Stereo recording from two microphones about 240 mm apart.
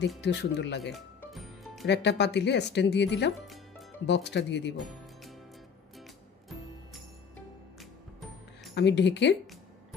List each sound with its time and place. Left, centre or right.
0.2 s speech: left
0.9 s music: centre
1.9 s speech: left
4.7 s music: centre
8.7 s speech: left